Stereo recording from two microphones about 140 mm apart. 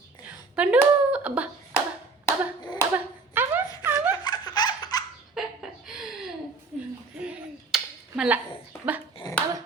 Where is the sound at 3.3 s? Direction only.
15° right (ahead or behind).